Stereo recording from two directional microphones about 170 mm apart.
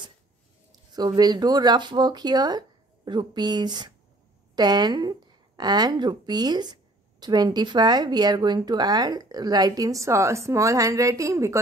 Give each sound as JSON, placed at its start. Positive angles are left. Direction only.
{"t": 0.7, "sound": "a woman's voice", "side_deg": -25}